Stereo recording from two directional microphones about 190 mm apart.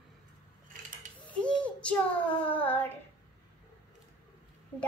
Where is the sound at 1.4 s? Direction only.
5° left (ahead or behind).